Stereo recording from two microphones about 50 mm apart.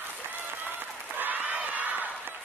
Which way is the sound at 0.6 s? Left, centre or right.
Right.